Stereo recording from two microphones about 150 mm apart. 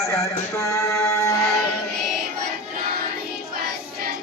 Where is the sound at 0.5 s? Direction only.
20° left (ahead or behind).